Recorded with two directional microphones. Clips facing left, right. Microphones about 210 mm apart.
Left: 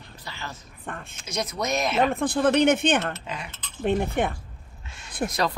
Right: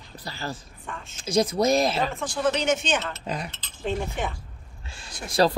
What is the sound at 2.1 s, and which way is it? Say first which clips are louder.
Speech: left 4 dB; 55° left (ahead or behind).